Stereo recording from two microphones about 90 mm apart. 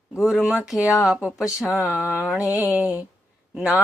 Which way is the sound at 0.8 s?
40° left (ahead or behind).